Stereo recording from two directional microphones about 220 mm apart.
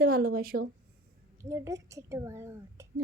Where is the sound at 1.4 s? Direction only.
10° right (ahead or behind).